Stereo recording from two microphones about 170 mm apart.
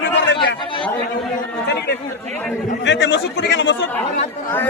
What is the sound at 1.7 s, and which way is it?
Speech, 75° left (ahead or behind).